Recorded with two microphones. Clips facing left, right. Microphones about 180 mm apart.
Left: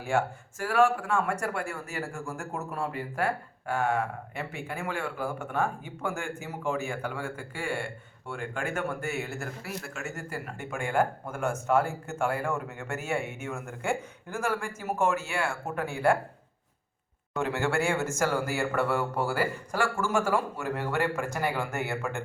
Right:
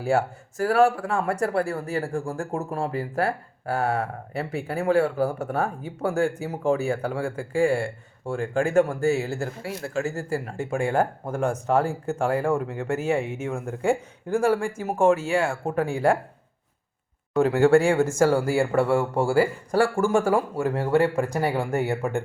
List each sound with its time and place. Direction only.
0.6 s speech: 35° right (ahead or behind)
17.3 s speech: 35° right (ahead or behind)